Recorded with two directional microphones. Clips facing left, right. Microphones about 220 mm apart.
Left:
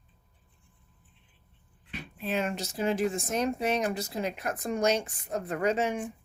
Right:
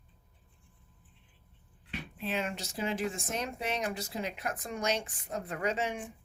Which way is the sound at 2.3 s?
45° left (ahead or behind).